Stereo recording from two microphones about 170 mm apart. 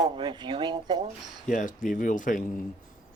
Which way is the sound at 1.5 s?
50° left (ahead or behind).